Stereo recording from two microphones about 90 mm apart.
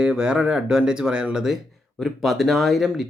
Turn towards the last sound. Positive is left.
turn(degrees=0)  # may be behind; listen again after turning